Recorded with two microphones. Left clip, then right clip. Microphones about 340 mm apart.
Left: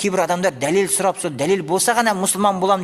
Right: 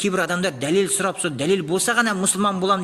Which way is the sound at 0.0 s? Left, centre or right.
Centre.